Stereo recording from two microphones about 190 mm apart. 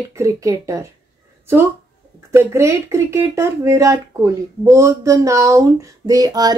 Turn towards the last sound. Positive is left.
turn(degrees=-20)  # may be behind; listen again after turning